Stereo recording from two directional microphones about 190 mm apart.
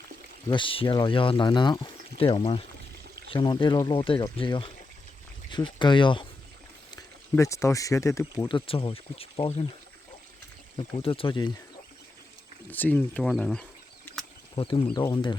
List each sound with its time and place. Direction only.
0.4 s speech: 25° left (ahead or behind)
10.8 s speech: 25° left (ahead or behind)
12.7 s speech: 10° left (ahead or behind)
14.5 s speech: 25° left (ahead or behind)